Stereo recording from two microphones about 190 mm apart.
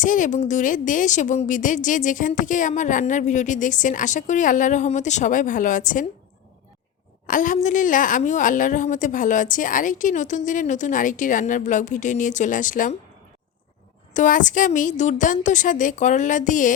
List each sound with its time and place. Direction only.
0.0 s a woman's voice: 45° left (ahead or behind)
7.3 s a woman's voice: 45° left (ahead or behind)
14.1 s a woman's voice: 40° left (ahead or behind)